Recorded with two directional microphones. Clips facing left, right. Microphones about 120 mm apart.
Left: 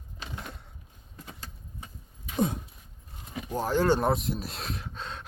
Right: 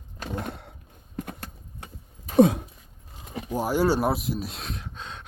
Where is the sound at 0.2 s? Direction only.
50° right (ahead or behind).